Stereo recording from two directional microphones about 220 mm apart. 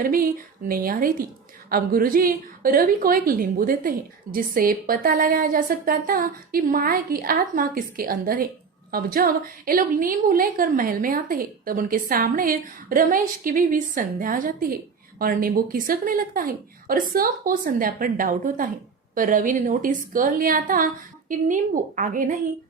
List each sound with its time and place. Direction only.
0.0 s a woman's voice: 40° right (ahead or behind)